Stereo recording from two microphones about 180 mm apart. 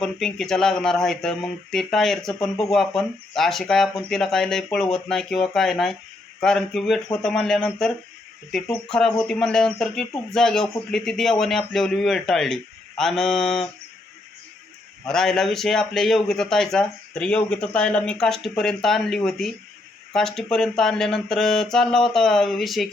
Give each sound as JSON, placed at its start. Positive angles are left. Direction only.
{"t": 0.0, "sound": "speech", "side_deg": 0}
{"t": 15.0, "sound": "speech", "side_deg": 5}